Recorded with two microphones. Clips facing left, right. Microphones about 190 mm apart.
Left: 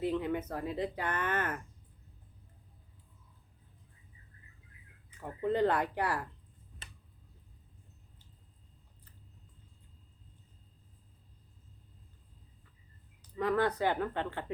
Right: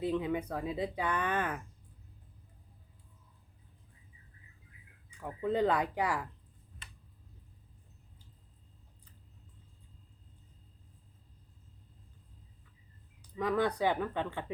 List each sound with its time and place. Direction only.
0.2 s speech: 10° right (ahead or behind)
5.4 s speech: 10° right (ahead or behind)
13.3 s speech: 15° right (ahead or behind)